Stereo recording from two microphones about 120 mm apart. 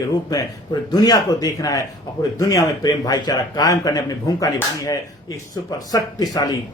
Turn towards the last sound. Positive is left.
turn(degrees=30)  # may be behind; listen again after turning